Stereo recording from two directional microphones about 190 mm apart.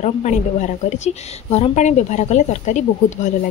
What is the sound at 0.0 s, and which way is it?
A woman's voice, 40° left (ahead or behind).